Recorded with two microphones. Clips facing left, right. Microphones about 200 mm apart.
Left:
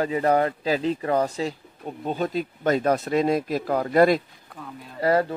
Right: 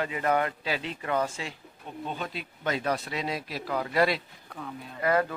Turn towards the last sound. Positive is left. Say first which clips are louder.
# left 4 dB
turn(degrees=30)  # may be behind; listen again after turning